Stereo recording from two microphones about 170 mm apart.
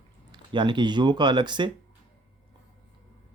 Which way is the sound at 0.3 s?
25° right (ahead or behind).